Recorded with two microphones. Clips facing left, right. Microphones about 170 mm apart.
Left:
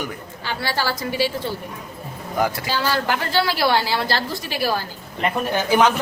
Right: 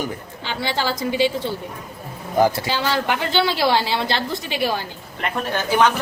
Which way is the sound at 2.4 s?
25° right (ahead or behind).